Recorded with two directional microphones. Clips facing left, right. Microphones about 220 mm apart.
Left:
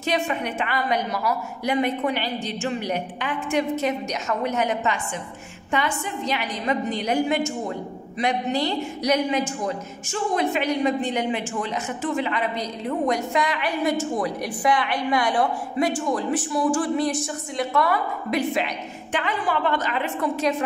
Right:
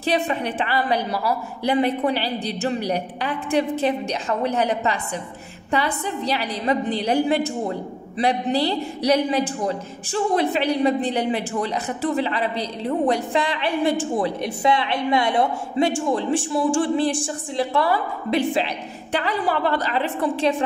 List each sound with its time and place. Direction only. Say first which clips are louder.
0.0 s a woman's voice: right 2 dB; 35° right (ahead or behind)